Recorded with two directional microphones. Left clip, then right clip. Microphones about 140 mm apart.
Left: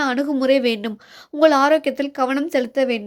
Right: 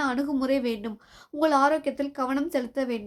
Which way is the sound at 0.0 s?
20° left (ahead or behind).